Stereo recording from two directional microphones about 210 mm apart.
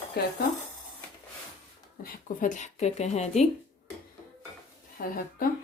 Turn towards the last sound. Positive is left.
turn(degrees=40)  # may be behind; listen again after turning